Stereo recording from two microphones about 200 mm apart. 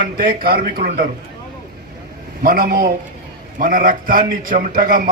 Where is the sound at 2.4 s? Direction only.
45° right (ahead or behind).